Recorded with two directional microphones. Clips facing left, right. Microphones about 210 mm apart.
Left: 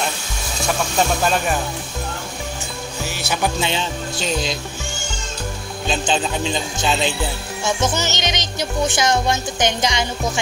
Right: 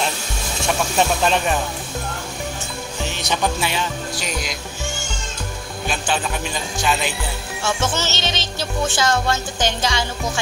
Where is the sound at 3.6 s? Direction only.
25° left (ahead or behind).